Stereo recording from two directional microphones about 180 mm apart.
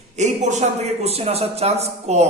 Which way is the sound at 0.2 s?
40° right (ahead or behind).